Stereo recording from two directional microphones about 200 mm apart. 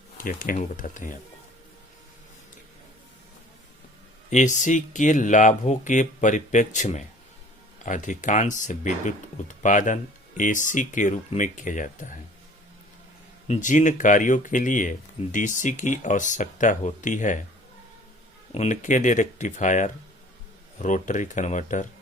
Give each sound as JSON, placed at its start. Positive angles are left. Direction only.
{"t": 0.2, "sound": "speech", "side_deg": 45}
{"t": 4.3, "sound": "speech", "side_deg": 40}
{"t": 13.5, "sound": "speech", "side_deg": 40}
{"t": 18.5, "sound": "speech", "side_deg": 35}